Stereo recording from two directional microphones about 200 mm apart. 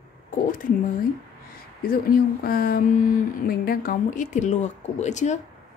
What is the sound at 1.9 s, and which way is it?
Speech, 50° left (ahead or behind).